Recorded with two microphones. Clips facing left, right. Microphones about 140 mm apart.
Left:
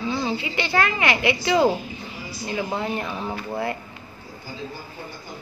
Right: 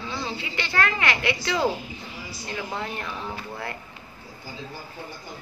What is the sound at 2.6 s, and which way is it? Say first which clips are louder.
Speech: left 5 dB; 25° left (ahead or behind).